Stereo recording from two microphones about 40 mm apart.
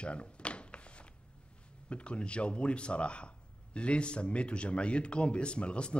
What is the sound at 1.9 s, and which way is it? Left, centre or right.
Speech, left.